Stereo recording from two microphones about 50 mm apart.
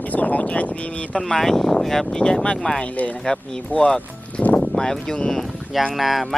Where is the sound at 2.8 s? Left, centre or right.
Left.